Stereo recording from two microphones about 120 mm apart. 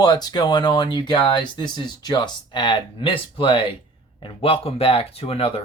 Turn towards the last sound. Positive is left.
turn(degrees=50)  # may be behind; listen again after turning